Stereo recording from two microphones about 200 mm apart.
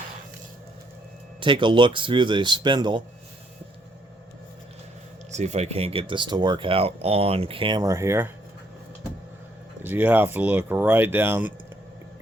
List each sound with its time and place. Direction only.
1.4 s speech: 25° right (ahead or behind)
5.3 s speech: 35° right (ahead or behind); by 8.3 s 15° right (ahead or behind)
9.8 s speech: 10° right (ahead or behind)